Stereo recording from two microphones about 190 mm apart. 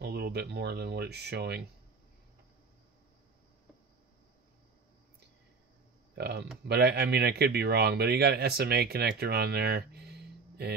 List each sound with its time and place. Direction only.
0.0 s a man's voice: 55° right (ahead or behind)
6.1 s a man's voice: 60° right (ahead or behind)